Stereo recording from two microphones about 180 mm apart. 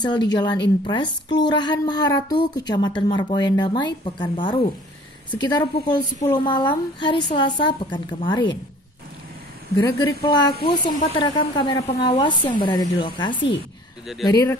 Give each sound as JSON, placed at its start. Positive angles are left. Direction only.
{"t": 0.0, "sound": "a woman's voice", "side_deg": 25}
{"t": 9.8, "sound": "a woman's voice", "side_deg": 15}